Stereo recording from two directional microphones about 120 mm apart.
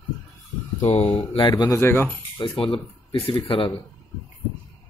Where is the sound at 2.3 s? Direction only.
45° left (ahead or behind).